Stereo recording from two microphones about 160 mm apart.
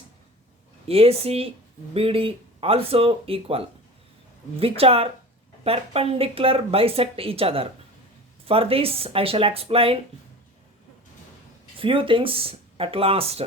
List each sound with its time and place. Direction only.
0.9 s speech: 40° right (ahead or behind)
11.8 s speech: 35° right (ahead or behind)